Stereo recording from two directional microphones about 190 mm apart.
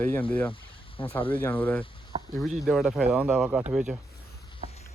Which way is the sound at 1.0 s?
25° left (ahead or behind).